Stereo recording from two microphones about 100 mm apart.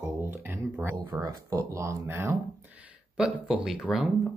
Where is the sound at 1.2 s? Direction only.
30° right (ahead or behind).